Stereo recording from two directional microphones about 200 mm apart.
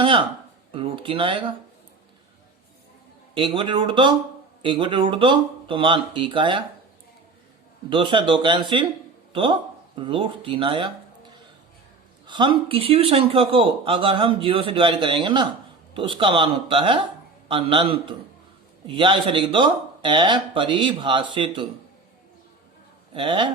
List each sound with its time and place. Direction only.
0.0 s a man's voice: 25° right (ahead or behind)
3.3 s a man's voice: 25° right (ahead or behind)
7.9 s a man's voice: 25° right (ahead or behind)
12.2 s a man's voice: 25° right (ahead or behind)
23.1 s a man's voice: 25° right (ahead or behind)